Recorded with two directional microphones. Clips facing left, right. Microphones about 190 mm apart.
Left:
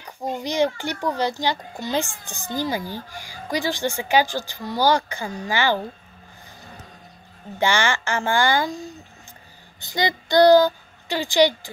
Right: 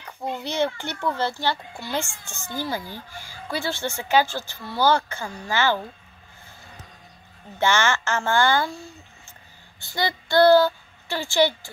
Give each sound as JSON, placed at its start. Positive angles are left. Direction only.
{"t": 0.3, "sound": "a sound", "side_deg": 15}
{"t": 0.7, "sound": "a child's voice", "side_deg": 15}
{"t": 7.5, "sound": "speech", "side_deg": 15}